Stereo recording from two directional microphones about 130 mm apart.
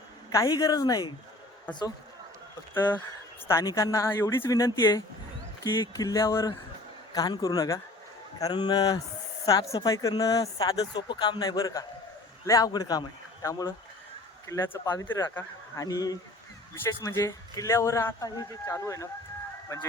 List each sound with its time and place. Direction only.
0.4 s speech: 30° left (ahead or behind)
2.7 s a woman's voice: 15° left (ahead or behind)